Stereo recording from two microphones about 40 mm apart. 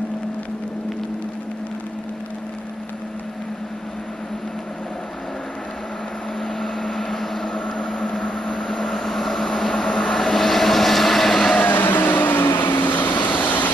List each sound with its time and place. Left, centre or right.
6.4 s vehicle: centre
7.5 s vehicle: left
8.2 s vehicle: left
8.5 s vehicle: centre
11.5 s vehicle: left